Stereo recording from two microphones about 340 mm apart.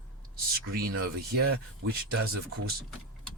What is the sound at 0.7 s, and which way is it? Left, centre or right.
Speech, right.